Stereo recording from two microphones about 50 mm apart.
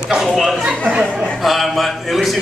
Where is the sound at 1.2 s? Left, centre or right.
Centre.